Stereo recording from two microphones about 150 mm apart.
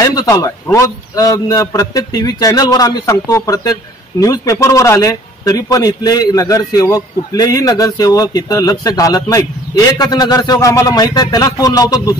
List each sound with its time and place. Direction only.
0.0 s a man's voice: 25° left (ahead or behind)